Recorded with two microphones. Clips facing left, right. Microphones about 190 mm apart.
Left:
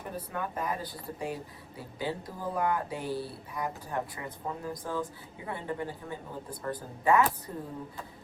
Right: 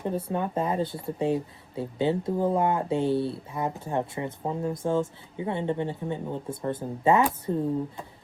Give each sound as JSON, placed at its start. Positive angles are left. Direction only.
{"t": 0.0, "sound": "speech", "side_deg": -25}